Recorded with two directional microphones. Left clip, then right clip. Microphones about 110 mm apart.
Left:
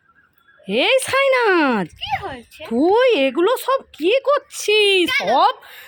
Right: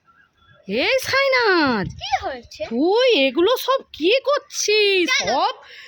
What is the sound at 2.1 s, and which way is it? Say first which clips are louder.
Speech: right 4 dB; 35° right (ahead or behind).